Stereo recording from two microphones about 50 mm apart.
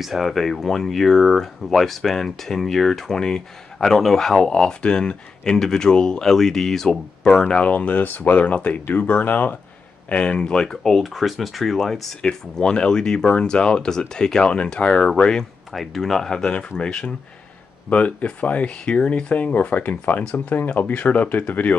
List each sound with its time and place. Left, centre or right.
0.0 s speech: centre
7.4 s speech: left
10.0 s speech: left